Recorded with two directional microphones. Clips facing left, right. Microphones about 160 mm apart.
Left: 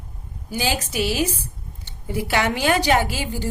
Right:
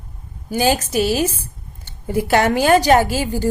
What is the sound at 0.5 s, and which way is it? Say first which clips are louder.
A woman's voice: right 7 dB; 45° right (ahead or behind).